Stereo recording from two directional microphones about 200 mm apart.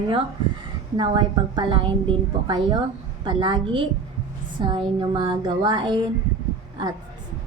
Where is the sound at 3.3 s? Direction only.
25° right (ahead or behind).